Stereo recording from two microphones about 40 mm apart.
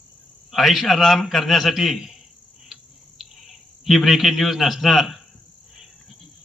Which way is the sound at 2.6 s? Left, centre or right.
Centre.